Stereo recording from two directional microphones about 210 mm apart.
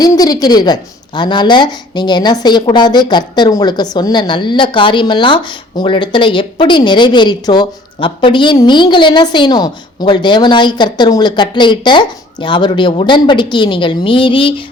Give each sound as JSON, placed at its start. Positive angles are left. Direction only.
{"t": 0.0, "sound": "a woman's voice", "side_deg": 20}